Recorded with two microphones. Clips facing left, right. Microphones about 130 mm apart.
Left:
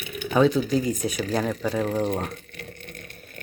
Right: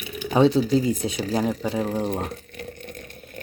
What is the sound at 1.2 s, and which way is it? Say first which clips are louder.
Speech: right 1 dB; 15° right (ahead or behind).